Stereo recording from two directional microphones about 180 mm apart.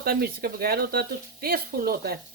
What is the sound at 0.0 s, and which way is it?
Speech, 60° right (ahead or behind).